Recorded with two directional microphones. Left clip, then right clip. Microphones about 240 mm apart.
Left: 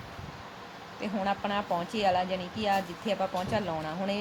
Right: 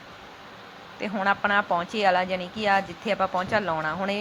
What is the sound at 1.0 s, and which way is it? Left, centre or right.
A woman's voice, centre.